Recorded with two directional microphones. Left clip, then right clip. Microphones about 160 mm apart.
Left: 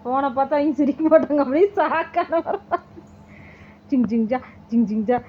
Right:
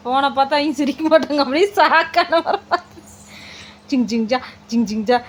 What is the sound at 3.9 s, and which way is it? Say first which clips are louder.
Child singing: right 3 dB; 15° right (ahead or behind).